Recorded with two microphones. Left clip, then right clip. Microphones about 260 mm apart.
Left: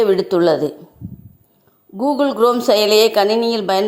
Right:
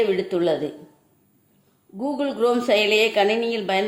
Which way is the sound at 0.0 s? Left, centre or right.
Left.